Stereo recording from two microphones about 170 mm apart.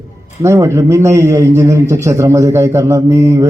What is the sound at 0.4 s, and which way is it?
A man's voice, 15° right (ahead or behind).